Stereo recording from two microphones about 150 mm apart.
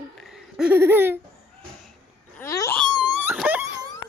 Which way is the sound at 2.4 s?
20° left (ahead or behind).